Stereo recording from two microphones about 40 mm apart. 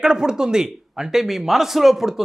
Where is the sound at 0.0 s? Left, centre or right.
Centre.